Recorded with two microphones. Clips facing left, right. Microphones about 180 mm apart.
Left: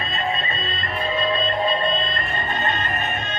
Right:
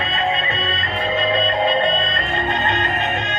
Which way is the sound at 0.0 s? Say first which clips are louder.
Right 4 dB; 80° right.